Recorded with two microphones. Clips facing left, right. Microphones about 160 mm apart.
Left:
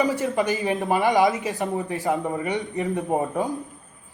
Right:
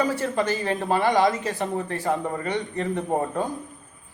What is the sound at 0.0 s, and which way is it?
A man's voice, 15° left (ahead or behind).